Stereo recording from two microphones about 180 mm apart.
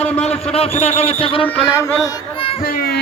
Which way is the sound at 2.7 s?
55° left (ahead or behind).